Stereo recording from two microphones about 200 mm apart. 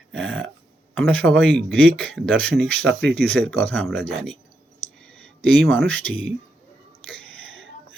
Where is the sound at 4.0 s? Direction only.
65° right (ahead or behind).